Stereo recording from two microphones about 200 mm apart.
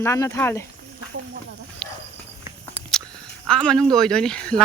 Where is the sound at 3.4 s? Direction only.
5° left (ahead or behind).